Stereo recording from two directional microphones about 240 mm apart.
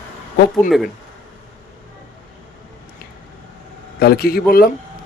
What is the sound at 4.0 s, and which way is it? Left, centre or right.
Speech, left.